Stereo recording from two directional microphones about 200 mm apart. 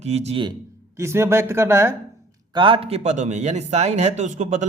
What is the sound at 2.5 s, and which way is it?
A man's voice, 25° right (ahead or behind).